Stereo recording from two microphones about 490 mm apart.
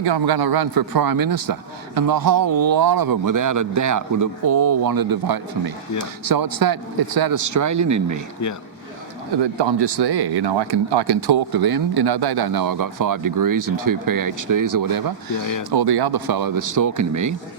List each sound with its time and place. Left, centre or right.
0.0 s a man's voice: right
9.4 s speech: right